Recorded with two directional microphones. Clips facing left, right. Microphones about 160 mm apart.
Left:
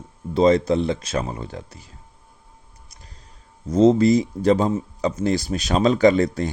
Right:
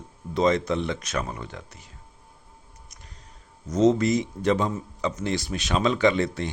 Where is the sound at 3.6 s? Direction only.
30° left (ahead or behind).